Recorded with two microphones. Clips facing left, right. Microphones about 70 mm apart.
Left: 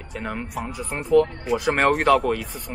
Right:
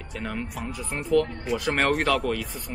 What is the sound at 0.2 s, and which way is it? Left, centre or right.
Speech, centre.